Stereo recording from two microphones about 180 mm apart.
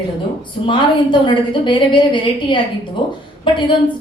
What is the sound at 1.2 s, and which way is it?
A woman's voice, 25° left (ahead or behind).